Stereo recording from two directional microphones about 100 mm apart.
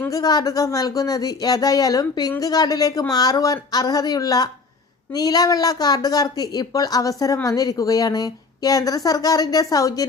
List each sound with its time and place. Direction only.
0.1 s speech: 40° left (ahead or behind)